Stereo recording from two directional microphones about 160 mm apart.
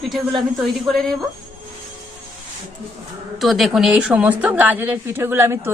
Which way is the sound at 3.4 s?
Centre (ahead or behind).